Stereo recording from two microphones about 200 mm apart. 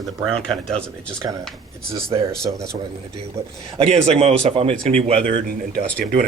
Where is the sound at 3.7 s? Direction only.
30° right (ahead or behind).